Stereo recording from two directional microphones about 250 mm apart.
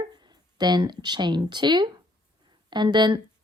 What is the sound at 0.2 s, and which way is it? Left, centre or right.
A woman's voice, centre.